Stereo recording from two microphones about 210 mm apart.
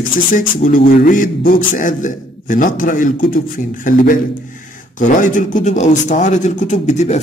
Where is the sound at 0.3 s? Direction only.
40° left (ahead or behind).